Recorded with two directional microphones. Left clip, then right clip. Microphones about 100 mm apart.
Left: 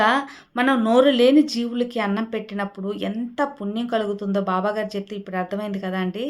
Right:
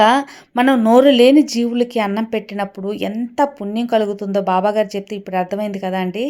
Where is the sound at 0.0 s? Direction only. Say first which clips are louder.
Right 6 dB; 75° right (ahead or behind).